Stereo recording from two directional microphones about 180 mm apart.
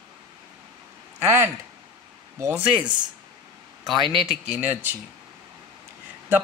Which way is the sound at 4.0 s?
30° right (ahead or behind).